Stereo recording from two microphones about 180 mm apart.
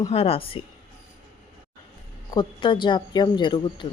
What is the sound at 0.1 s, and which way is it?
Speech, 30° left (ahead or behind).